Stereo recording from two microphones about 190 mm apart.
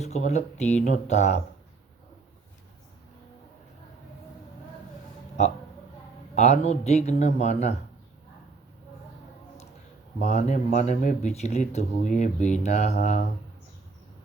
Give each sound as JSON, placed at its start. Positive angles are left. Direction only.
{"t": 0.0, "sound": "speech", "side_deg": 35}
{"t": 6.3, "sound": "speech", "side_deg": 40}
{"t": 10.2, "sound": "speech", "side_deg": 40}